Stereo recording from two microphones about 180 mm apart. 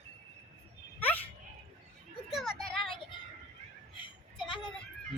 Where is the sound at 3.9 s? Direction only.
25° left (ahead or behind).